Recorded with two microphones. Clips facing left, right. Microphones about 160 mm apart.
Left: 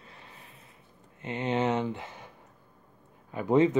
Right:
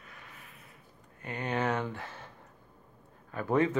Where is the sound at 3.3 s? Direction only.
20° left (ahead or behind).